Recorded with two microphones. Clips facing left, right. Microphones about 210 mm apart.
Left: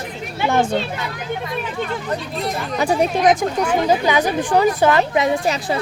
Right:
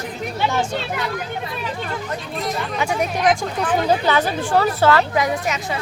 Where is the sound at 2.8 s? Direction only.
30° left (ahead or behind).